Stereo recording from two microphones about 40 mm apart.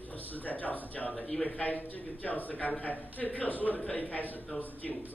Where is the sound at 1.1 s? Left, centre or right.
Centre.